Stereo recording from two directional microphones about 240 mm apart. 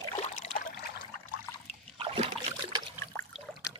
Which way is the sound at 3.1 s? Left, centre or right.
Centre.